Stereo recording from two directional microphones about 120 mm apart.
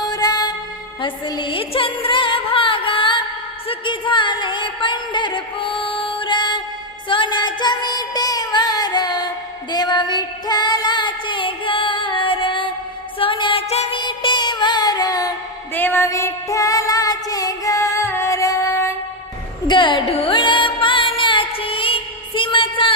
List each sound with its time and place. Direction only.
0.0 s music: 35° left (ahead or behind)
3.7 s a sound: 45° left (ahead or behind)
7.1 s music: 40° left (ahead or behind); by 13.8 s 55° left (ahead or behind)
13.9 s music: 40° left (ahead or behind)
15.7 s music: 15° left (ahead or behind)
19.6 s music: 40° left (ahead or behind)